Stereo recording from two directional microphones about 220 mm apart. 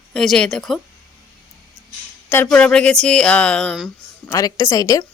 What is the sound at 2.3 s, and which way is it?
A woman's voice, 5° left (ahead or behind).